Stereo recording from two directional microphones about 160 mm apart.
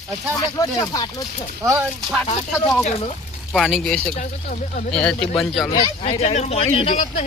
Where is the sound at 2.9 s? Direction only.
45° left (ahead or behind).